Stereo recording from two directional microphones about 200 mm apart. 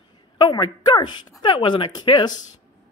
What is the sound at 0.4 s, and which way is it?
Speech, 20° left (ahead or behind).